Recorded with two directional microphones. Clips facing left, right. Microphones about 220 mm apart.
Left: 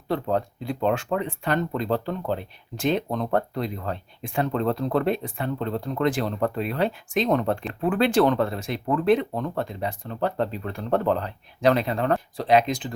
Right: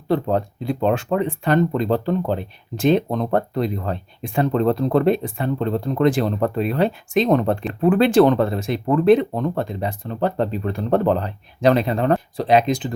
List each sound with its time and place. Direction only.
0.1 s speech: 30° right (ahead or behind)